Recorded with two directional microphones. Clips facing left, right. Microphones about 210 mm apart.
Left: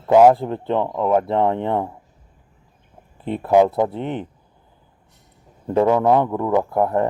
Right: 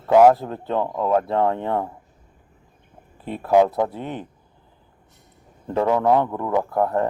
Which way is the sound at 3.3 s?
20° left (ahead or behind).